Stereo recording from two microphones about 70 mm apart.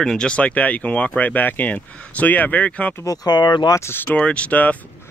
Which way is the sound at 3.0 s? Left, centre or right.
Left.